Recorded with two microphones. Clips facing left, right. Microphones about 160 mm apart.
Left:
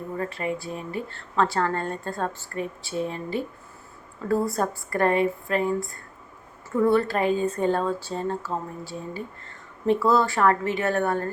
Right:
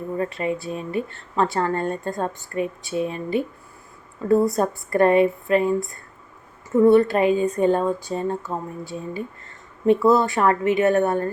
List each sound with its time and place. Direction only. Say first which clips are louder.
0.2 s speech: right 3 dB; 20° right (ahead or behind)